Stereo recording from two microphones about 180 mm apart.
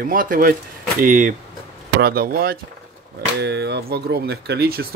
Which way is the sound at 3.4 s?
70° right (ahead or behind).